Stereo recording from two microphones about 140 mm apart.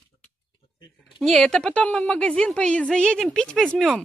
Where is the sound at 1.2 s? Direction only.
5° left (ahead or behind).